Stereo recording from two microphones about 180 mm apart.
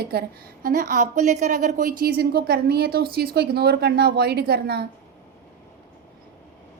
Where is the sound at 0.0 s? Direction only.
60° right (ahead or behind).